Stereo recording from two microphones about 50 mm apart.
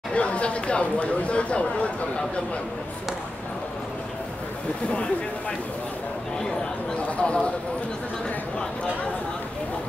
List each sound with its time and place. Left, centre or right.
0.1 s speech: left
7.2 s speech: left